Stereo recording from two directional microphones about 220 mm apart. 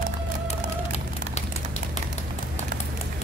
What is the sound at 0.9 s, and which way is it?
Bird, 30° left (ahead or behind).